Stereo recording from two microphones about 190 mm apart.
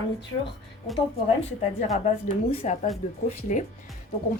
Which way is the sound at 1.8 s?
35° left (ahead or behind).